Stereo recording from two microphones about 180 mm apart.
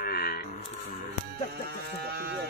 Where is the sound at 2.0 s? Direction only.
60° right (ahead or behind).